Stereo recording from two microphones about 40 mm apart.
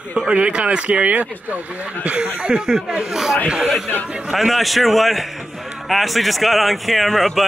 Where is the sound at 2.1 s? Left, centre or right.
Right; by 3.4 s centre.